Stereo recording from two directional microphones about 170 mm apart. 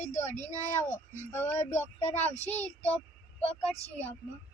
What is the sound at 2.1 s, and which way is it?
Speech, 40° left (ahead or behind).